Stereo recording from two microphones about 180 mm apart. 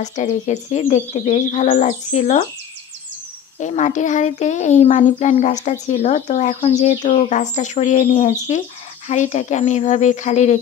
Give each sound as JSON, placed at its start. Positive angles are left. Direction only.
{"t": 0.0, "sound": "a child's voice", "side_deg": 40}
{"t": 3.5, "sound": "a child's voice", "side_deg": 40}